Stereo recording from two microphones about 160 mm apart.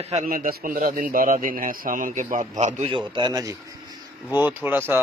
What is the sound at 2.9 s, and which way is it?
A man's voice, 30° right (ahead or behind).